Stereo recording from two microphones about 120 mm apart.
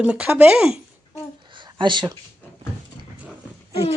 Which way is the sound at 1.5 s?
40° right (ahead or behind).